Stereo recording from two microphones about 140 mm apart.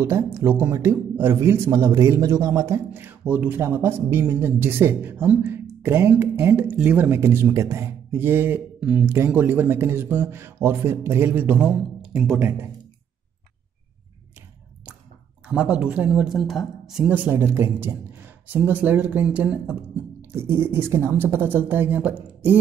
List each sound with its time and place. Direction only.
0.0 s speech: 20° right (ahead or behind)
12.4 s speech: 15° right (ahead or behind)
15.4 s speech: 10° right (ahead or behind)